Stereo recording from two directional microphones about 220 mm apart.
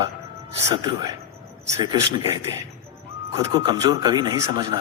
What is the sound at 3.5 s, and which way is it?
A man's voice, 15° right (ahead or behind).